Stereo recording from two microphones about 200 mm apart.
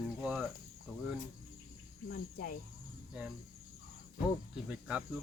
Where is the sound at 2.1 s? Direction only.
45° left (ahead or behind).